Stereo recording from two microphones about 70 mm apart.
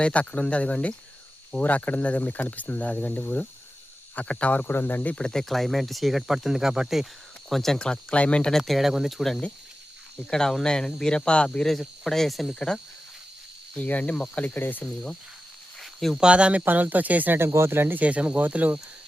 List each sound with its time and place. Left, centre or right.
0.0 s speech: centre
5.1 s speech: centre
7.5 s speech: centre
13.7 s speech: left
15.8 s a sound: centre
16.1 s speech: centre; by 18.0 s right
18.0 s speech: centre